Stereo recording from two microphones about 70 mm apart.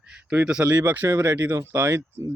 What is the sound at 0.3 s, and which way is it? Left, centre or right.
Speech, centre.